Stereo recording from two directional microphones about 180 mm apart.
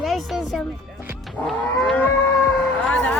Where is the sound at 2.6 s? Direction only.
5° left (ahead or behind).